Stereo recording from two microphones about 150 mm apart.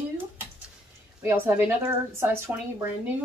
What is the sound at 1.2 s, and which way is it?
Speech, 15° right (ahead or behind).